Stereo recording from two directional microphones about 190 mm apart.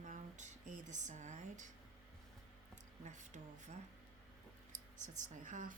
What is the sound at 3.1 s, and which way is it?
Speech, 40° right (ahead or behind).